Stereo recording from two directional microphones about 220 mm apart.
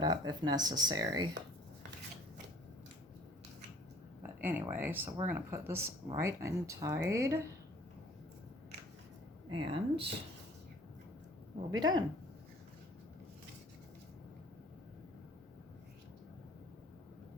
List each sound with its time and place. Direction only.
0.0 s speech: 20° right (ahead or behind)
4.2 s speech: 10° right (ahead or behind)
9.5 s speech: 25° right (ahead or behind)
11.7 s speech: 20° right (ahead or behind)